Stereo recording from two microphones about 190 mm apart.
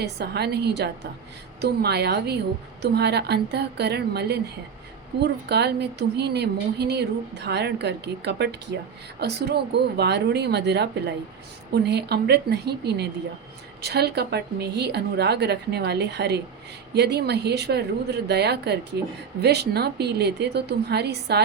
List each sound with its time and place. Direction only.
0.0 s a woman's voice: 60° right (ahead or behind)